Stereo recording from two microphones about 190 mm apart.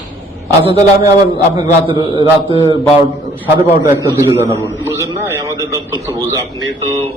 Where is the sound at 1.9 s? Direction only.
30° right (ahead or behind).